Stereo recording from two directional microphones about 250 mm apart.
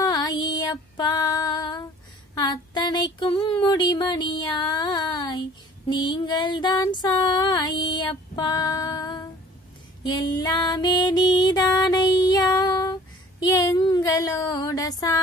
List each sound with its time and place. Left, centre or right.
0.0 s female singing: centre
2.3 s a sound: centre
3.6 s female singing: centre
12.2 s child singing: centre